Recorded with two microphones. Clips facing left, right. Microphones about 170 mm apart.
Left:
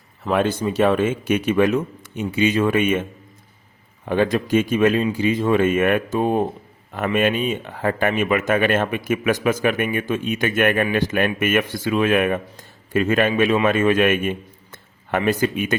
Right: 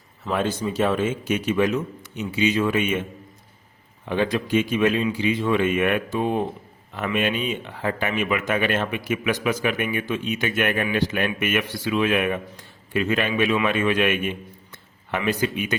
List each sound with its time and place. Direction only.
0.3 s a man's voice: 65° left (ahead or behind)
4.0 s speech: 50° left (ahead or behind)